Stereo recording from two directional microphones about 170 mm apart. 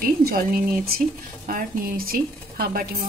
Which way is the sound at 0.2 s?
60° right (ahead or behind).